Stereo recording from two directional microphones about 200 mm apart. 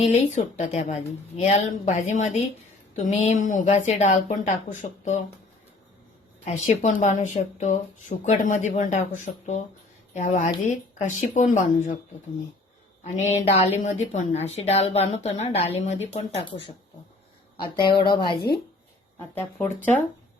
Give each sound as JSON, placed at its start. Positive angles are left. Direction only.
{"t": 0.0, "sound": "a woman's voice", "side_deg": 35}
{"t": 6.4, "sound": "a woman's voice", "side_deg": 35}
{"t": 13.1, "sound": "a woman's voice", "side_deg": 35}
{"t": 17.6, "sound": "a woman's voice", "side_deg": 20}
{"t": 19.3, "sound": "speech", "side_deg": 10}